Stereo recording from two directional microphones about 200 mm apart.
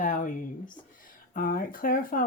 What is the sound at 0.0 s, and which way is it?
Speech, 40° left (ahead or behind).